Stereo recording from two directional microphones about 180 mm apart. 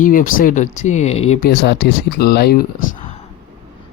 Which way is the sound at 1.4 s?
65° left (ahead or behind).